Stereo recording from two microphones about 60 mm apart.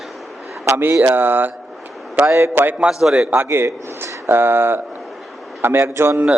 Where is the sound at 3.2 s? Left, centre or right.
Right.